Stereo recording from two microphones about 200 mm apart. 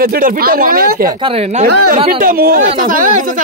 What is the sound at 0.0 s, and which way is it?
A man's voice, 50° right (ahead or behind).